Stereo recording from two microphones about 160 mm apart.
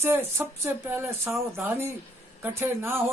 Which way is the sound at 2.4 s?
15° right (ahead or behind).